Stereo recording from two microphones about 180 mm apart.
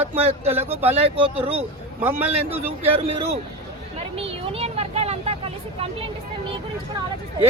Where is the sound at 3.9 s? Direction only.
30° right (ahead or behind).